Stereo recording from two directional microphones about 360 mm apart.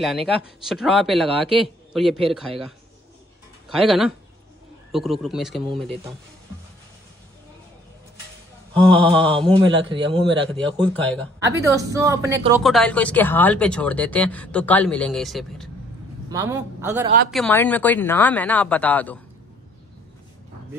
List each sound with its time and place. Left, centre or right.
0.7 s speech: centre
3.6 s speech: centre
8.7 s speech: centre
9.8 s a man's voice: centre
10.9 s speech: centre
11.4 s a man's voice: centre
17.3 s speech: centre